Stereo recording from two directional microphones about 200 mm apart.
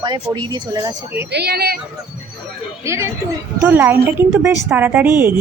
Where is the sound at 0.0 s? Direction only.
20° right (ahead or behind).